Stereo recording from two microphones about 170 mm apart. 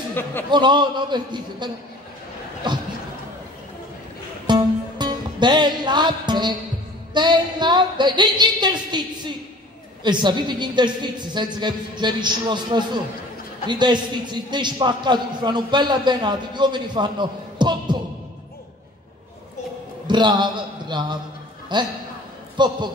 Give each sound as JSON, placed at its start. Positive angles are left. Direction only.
{"t": 0.1, "sound": "a man's voice", "side_deg": 10}
{"t": 0.5, "sound": "a man's voice", "side_deg": -25}
{"t": 4.5, "sound": "music", "side_deg": -25}
{"t": 7.2, "sound": "a man's voice", "side_deg": -25}
{"t": 20.1, "sound": "a man's voice", "side_deg": -25}